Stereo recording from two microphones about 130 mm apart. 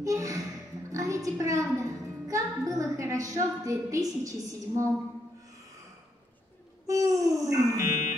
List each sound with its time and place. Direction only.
0.0 s a sound: 25° right (ahead or behind)
0.8 s a woman's voice: 25° right (ahead or behind)
6.9 s wail: 25° right (ahead or behind)